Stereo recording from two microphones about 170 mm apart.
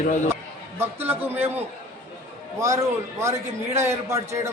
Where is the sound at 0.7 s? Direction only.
10° right (ahead or behind).